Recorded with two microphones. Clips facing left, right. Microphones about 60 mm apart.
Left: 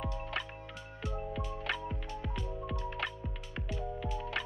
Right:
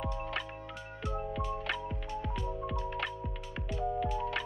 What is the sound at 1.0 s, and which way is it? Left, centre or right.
Music, right.